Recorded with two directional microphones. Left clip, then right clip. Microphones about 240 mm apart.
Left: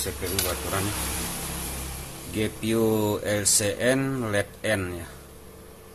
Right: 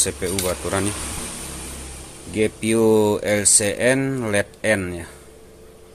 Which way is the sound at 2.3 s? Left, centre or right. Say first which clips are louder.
Right 7 dB; right.